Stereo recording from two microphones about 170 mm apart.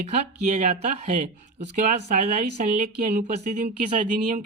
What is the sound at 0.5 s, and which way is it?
Speech, 45° right (ahead or behind).